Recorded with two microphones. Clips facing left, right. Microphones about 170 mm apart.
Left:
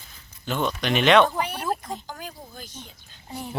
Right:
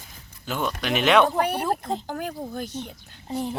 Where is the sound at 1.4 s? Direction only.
60° right (ahead or behind).